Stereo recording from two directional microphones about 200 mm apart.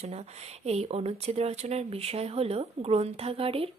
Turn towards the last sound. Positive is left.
turn(degrees=-30)  # may be behind; listen again after turning